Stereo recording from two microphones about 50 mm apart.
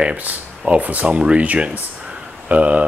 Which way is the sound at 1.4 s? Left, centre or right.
Right.